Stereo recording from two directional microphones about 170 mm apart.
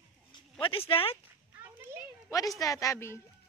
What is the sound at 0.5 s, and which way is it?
Speech, 30° left (ahead or behind).